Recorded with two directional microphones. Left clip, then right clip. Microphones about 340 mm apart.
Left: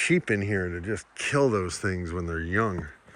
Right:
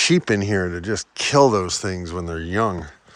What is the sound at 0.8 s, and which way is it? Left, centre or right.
Speech, right.